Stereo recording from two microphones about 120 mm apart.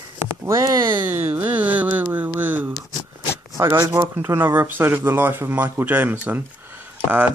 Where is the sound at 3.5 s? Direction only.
25° right (ahead or behind).